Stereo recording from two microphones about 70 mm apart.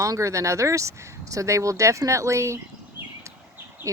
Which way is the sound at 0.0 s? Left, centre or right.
Right.